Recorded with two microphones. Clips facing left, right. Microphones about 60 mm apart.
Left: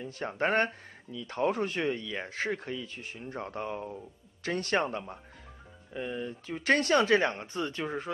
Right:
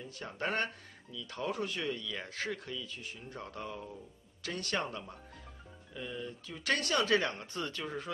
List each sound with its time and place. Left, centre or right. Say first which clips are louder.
0.0 s speech: left 7 dB; left